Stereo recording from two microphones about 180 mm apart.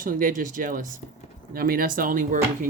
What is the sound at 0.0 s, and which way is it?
Speech, 50° right (ahead or behind).